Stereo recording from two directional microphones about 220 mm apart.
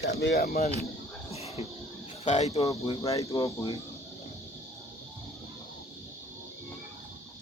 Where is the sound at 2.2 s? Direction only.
30° left (ahead or behind).